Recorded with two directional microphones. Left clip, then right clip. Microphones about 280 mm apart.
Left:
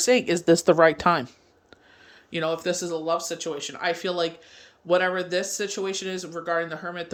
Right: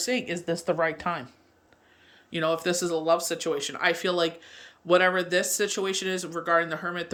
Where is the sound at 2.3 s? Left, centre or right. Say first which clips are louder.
Even; centre.